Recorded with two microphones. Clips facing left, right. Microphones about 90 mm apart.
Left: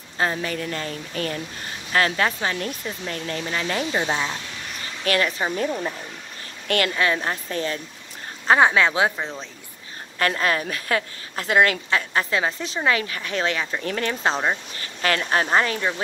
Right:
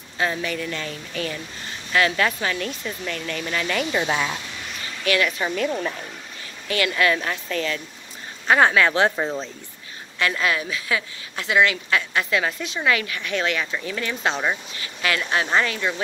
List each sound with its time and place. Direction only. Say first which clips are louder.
0.2 s speech: even; 35° left (ahead or behind)
5.0 s speech: even; 40° left (ahead or behind)
5.7 s speech: right 1 dB; 15° left (ahead or behind)
7.0 s speech: right 1 dB; 25° left (ahead or behind)
8.5 s speech: right 1 dB; 15° left (ahead or behind)
9.1 s speech: right 5 dB; 10° right (ahead or behind)
10.1 s a woman's voice: left 1 dB; 40° left (ahead or behind)
11.9 s speech: even; 35° left (ahead or behind)
13.8 s a woman's voice: left 4 dB; 45° left (ahead or behind)